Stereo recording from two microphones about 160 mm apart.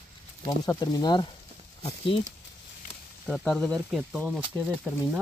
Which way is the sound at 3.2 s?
5° left (ahead or behind).